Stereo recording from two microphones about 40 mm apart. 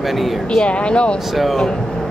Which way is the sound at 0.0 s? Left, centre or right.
Centre.